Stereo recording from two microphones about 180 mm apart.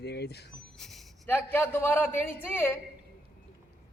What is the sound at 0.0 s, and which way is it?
Speech, 65° left (ahead or behind).